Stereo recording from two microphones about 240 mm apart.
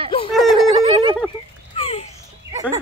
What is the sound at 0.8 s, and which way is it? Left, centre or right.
Speech, right.